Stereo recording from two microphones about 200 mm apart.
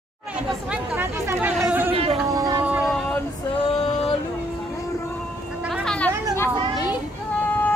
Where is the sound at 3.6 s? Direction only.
30° left (ahead or behind).